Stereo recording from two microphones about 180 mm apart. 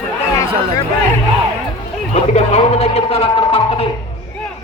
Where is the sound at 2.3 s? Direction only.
35° left (ahead or behind).